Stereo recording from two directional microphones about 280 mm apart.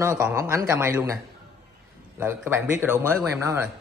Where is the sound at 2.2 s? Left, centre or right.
Centre.